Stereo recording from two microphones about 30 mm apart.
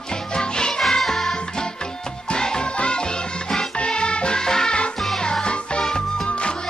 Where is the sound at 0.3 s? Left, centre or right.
Left.